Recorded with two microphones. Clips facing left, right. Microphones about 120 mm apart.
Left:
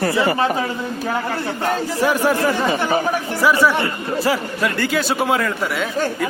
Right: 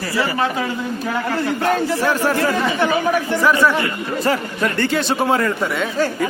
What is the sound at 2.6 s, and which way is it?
Speech, 40° left (ahead or behind).